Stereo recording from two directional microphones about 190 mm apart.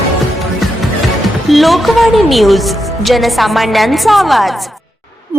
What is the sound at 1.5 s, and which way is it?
A woman's voice, centre (ahead or behind).